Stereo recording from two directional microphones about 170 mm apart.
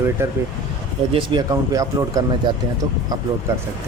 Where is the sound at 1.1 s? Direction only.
30° right (ahead or behind).